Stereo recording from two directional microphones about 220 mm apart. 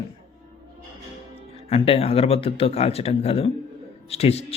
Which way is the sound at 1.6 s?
25° left (ahead or behind).